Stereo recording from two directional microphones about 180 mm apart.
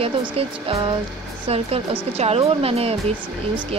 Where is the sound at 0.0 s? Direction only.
30° right (ahead or behind).